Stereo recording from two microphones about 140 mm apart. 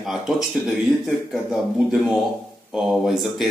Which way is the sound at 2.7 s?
5° right (ahead or behind).